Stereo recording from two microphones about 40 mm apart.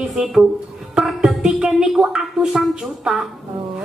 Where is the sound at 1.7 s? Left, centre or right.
Centre.